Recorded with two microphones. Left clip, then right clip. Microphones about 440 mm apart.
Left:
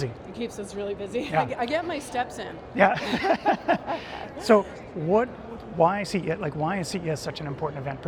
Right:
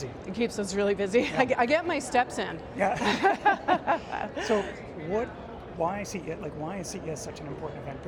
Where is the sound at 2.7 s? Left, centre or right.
Left.